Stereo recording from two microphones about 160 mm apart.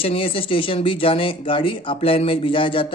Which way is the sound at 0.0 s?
35° left (ahead or behind).